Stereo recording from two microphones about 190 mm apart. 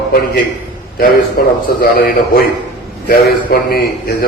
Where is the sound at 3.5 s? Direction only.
55° left (ahead or behind).